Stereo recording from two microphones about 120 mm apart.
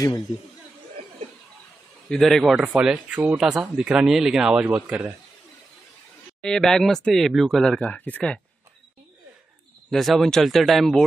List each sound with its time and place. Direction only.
2.0 s speech: 5° left (ahead or behind)
2.5 s speech: 10° right (ahead or behind)
6.4 s speech: 5° left (ahead or behind)
7.8 s speech: 15° left (ahead or behind)
9.8 s speech: centre (ahead or behind)